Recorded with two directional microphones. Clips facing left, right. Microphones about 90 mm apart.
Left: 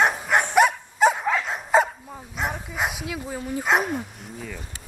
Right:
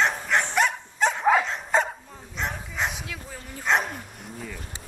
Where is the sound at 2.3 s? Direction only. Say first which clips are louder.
Left 2 dB; 10° left (ahead or behind).